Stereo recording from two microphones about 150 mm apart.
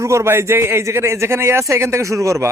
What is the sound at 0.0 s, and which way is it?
A man's voice, 20° right (ahead or behind).